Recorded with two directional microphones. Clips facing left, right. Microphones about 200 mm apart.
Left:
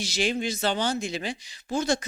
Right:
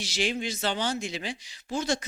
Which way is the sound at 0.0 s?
45° left (ahead or behind).